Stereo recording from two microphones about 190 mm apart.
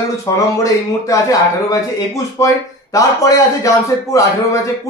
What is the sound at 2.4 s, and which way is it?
Speech, 15° left (ahead or behind).